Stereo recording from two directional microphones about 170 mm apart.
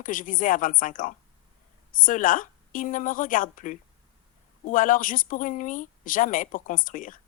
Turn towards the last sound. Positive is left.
turn(degrees=50)  # may be behind; listen again after turning